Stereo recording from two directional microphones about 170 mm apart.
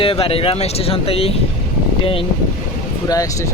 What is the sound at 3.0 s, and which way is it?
Speech, 20° left (ahead or behind).